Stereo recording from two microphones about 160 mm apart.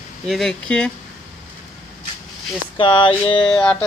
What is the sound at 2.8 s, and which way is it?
Speech, 30° left (ahead or behind).